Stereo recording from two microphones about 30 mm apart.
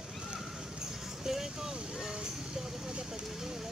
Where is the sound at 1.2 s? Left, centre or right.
Centre.